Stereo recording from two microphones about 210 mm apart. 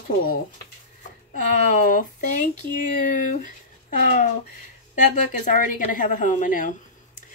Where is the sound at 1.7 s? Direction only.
40° left (ahead or behind).